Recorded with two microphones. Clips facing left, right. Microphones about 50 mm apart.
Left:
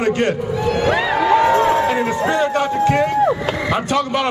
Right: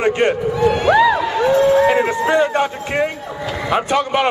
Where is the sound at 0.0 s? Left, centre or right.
Right.